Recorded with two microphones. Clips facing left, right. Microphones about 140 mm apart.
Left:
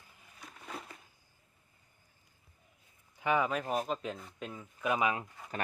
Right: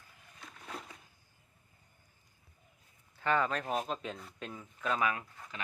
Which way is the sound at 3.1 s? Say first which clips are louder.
Left 1 dB; 10° left (ahead or behind).